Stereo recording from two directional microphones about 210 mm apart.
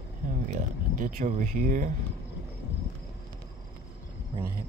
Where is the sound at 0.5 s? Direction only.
35° right (ahead or behind).